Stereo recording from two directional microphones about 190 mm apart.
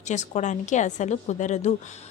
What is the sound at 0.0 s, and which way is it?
A woman's voice, 40° left (ahead or behind).